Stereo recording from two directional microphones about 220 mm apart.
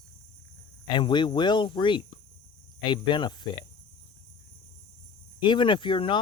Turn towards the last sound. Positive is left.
turn(degrees=25)  # may be behind; listen again after turning